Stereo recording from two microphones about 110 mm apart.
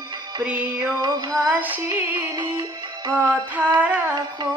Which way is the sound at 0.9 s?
40° right (ahead or behind).